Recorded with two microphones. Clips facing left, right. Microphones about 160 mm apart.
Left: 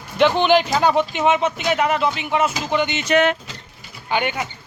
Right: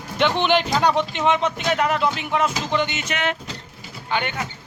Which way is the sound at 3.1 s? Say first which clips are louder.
Left 10 dB; 50° left (ahead or behind).